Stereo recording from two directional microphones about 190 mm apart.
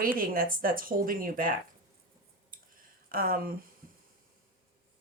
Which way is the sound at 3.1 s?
50° right (ahead or behind).